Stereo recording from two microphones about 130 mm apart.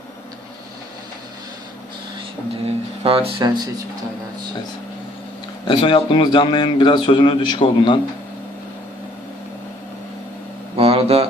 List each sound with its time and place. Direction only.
2.6 s speech: 45° right (ahead or behind)
5.6 s a man's voice: 40° left (ahead or behind)
10.8 s a sound: 50° right (ahead or behind)